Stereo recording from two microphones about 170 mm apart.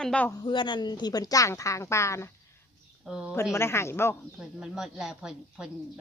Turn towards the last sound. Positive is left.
turn(degrees=-5)  # may be behind; listen again after turning